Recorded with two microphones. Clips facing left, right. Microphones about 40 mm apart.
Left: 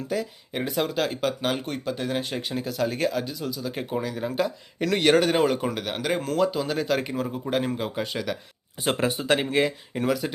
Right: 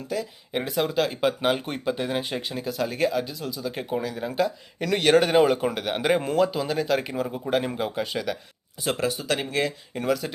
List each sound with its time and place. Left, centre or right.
0.1 s speech: centre
1.2 s speech: centre
6.0 s speech: centre
6.4 s speech: centre
8.8 s speech: left; by 10.3 s centre